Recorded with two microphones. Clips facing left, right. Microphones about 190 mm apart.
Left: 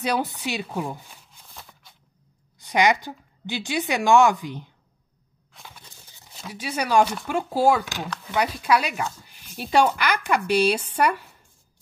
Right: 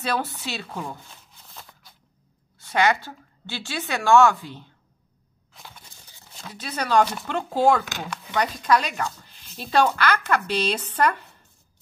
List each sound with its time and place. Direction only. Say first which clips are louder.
0.0 s speech: left 2 dB; 15° left (ahead or behind)
1.4 s shuffling cards: even; centre (ahead or behind)
2.6 s speech: left 1 dB; 15° left (ahead or behind)
6.3 s speech: left 3 dB; 10° left (ahead or behind)